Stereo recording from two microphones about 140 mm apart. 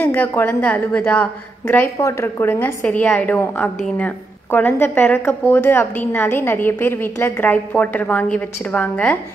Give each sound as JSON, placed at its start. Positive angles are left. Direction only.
{"t": 0.0, "sound": "a woman's voice", "side_deg": 15}